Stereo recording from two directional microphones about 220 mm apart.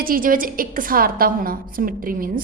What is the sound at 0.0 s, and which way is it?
A woman's voice, 40° right (ahead or behind).